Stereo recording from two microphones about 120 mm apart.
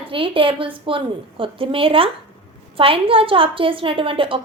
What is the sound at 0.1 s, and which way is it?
A woman's voice, 50° right (ahead or behind).